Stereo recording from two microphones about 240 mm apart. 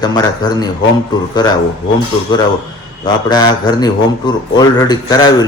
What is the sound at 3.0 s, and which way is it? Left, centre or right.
A man's voice, centre.